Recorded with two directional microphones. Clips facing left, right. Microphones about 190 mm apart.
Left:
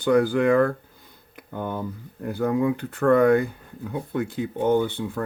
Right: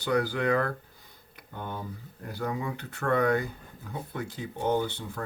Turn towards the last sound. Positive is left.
turn(degrees=55)  # may be behind; listen again after turning